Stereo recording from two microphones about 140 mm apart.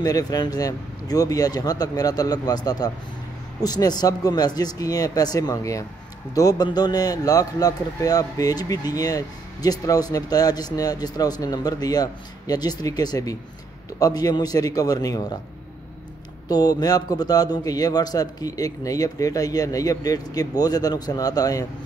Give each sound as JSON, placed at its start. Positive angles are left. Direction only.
{"t": 0.0, "sound": "a man's voice", "side_deg": 25}
{"t": 16.4, "sound": "a man's voice", "side_deg": 25}